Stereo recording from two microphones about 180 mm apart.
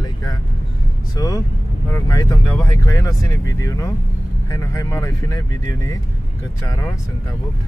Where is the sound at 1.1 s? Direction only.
20° left (ahead or behind).